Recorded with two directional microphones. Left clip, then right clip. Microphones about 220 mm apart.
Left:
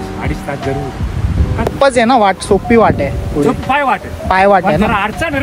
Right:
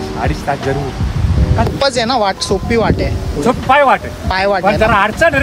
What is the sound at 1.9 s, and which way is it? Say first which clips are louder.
Speech: left 6 dB; 25° left (ahead or behind).